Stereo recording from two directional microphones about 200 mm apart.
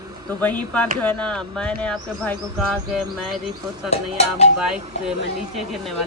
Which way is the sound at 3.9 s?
30° left (ahead or behind).